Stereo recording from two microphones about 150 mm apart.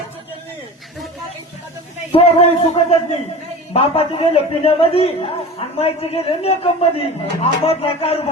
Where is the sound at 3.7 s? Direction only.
40° left (ahead or behind).